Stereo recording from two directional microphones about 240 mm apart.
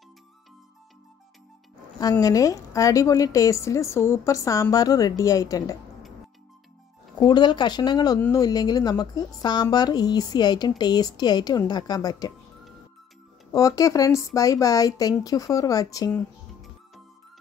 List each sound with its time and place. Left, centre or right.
2.0 s a woman's voice: centre
7.2 s a woman's voice: centre
13.5 s a woman's voice: centre